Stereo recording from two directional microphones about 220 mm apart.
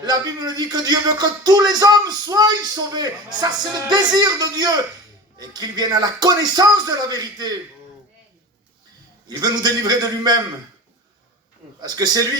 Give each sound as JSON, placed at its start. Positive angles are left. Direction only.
{"t": 0.0, "sound": "speech", "side_deg": -20}
{"t": 9.2, "sound": "speech", "side_deg": -20}
{"t": 11.8, "sound": "speech", "side_deg": -20}